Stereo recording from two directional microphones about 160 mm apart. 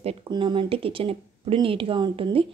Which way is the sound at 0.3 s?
30° right (ahead or behind).